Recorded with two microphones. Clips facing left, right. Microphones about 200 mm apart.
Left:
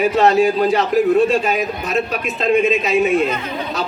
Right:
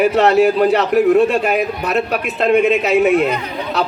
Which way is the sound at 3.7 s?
65° right (ahead or behind).